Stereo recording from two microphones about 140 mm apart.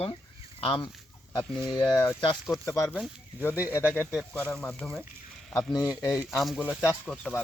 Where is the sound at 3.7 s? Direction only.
15° left (ahead or behind).